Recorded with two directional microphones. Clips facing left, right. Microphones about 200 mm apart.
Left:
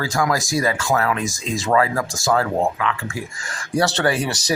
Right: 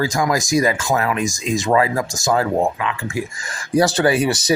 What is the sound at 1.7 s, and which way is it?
Speech, 20° right (ahead or behind).